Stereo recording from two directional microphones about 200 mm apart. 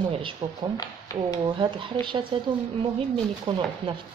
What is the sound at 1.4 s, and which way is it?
Speech, 20° right (ahead or behind).